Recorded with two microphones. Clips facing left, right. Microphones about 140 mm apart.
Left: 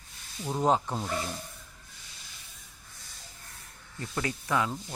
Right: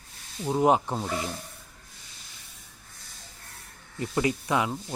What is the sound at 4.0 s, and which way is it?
Speech, 20° right (ahead or behind).